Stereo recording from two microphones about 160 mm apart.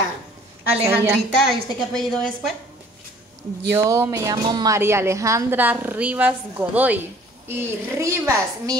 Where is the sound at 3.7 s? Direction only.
20° right (ahead or behind).